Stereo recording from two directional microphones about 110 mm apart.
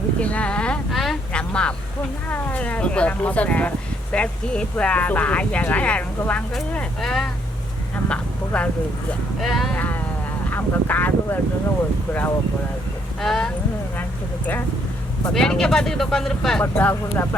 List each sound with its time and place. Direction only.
0.2 s a sound: 10° left (ahead or behind)
2.3 s speech: 15° left (ahead or behind)
8.1 s a sound: 10° left (ahead or behind)
9.4 s speech: centre (ahead or behind)
9.7 s a sound: 15° left (ahead or behind)
10.5 s speech: 15° left (ahead or behind)
13.2 s speech: 5° left (ahead or behind)
15.3 s speech: 5° left (ahead or behind)
16.7 s speech: 20° left (ahead or behind)